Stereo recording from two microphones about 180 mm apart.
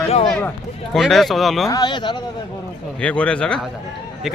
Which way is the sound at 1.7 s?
25° left (ahead or behind).